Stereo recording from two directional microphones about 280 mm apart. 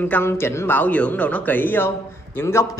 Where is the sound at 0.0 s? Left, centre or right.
Centre.